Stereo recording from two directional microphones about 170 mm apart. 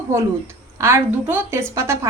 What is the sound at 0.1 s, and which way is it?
A woman's voice, 15° right (ahead or behind).